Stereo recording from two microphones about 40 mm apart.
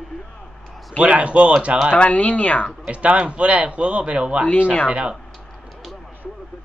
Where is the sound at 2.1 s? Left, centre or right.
Left.